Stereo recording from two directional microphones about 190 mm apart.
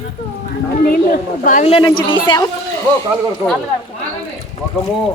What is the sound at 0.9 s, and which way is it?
Speech, 50° left (ahead or behind).